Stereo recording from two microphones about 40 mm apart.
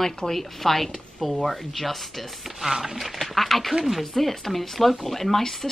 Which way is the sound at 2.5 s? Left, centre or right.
Centre.